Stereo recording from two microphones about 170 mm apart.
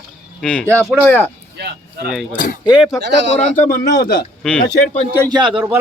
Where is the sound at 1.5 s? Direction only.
75° right (ahead or behind).